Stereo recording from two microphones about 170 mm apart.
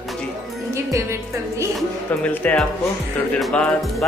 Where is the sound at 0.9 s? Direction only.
15° right (ahead or behind).